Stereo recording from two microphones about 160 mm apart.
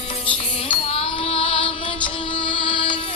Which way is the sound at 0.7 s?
40° left (ahead or behind).